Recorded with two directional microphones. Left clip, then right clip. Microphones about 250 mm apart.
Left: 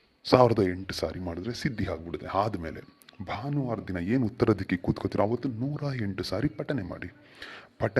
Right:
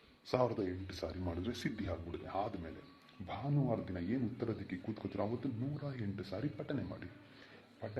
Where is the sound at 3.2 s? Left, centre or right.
Left.